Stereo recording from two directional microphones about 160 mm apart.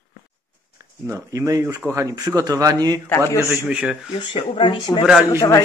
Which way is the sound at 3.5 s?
5° right (ahead or behind).